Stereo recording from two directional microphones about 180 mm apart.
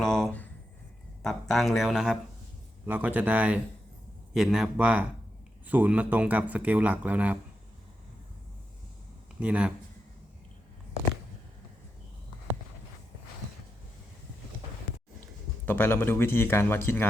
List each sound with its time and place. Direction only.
0.0 s a sound: centre (ahead or behind)
1.2 s a man's voice: centre (ahead or behind)
9.4 s a man's voice: 5° right (ahead or behind)
15.6 s speech: 10° left (ahead or behind)